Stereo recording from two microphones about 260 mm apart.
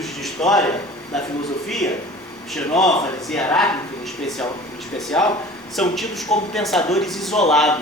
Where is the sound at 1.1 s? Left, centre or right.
Centre.